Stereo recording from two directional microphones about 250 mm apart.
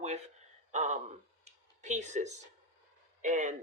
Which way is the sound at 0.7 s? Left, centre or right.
Right.